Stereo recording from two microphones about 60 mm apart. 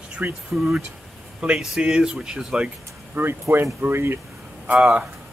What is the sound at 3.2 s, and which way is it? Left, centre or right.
Speech, right.